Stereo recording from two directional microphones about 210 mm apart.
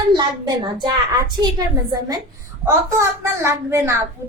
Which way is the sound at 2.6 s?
10° right (ahead or behind).